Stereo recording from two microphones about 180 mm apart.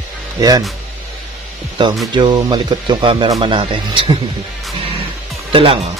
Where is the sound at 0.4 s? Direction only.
20° right (ahead or behind).